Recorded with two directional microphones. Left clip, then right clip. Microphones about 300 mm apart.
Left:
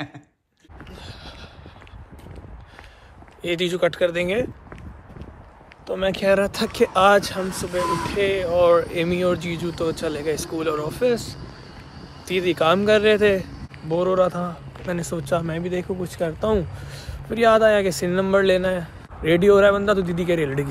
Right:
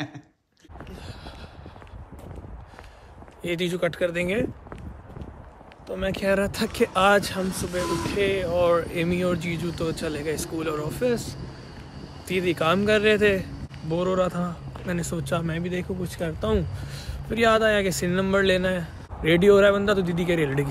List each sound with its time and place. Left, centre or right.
0.9 s a sound: centre
3.4 s speech: centre
5.9 s speech: centre
7.4 s speech: centre
8.1 s speech: centre